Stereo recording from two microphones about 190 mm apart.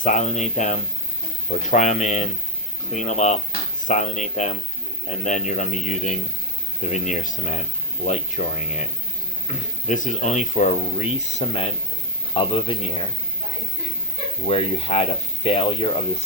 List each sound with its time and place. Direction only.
0.0 s speech: 40° left (ahead or behind)
14.4 s speech: 30° left (ahead or behind)